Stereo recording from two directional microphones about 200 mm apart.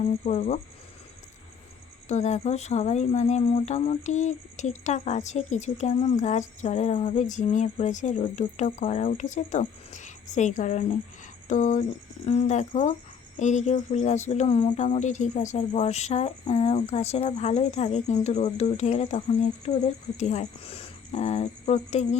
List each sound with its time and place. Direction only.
0.0 s speech: 35° left (ahead or behind)
2.0 s speech: 35° left (ahead or behind)